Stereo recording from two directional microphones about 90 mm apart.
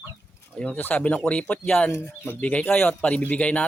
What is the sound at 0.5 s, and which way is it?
Speech, 15° left (ahead or behind).